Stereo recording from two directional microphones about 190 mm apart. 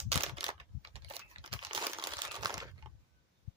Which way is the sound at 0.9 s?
30° right (ahead or behind).